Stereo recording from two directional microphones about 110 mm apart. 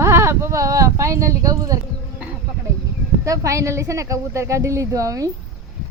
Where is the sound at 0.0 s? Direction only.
25° right (ahead or behind).